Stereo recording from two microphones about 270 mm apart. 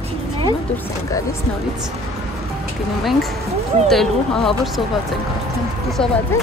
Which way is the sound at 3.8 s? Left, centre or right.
Centre.